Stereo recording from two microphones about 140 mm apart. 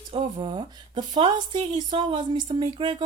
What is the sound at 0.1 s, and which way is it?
A woman's voice, 40° right (ahead or behind).